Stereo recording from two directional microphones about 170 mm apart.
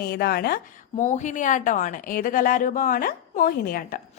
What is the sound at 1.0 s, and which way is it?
A woman's voice, 45° left (ahead or behind).